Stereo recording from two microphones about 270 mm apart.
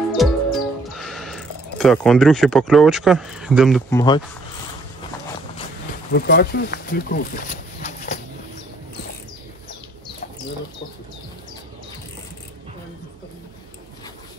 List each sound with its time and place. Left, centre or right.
0.2 s music: centre
3.9 s speech: centre
6.1 s speech: left